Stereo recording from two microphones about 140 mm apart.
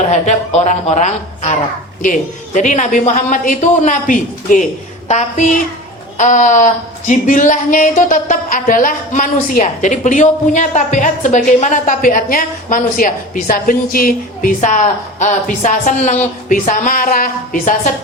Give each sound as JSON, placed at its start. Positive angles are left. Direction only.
{"t": 0.1, "sound": "a woman's voice", "side_deg": 55}
{"t": 2.0, "sound": "a woman's voice", "side_deg": 65}
{"t": 5.0, "sound": "a woman's voice", "side_deg": 55}